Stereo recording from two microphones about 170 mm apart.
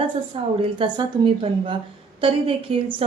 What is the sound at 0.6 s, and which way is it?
A woman's voice, 30° right (ahead or behind).